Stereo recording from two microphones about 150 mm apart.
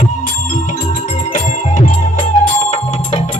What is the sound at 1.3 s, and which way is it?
Music, 55° left (ahead or behind).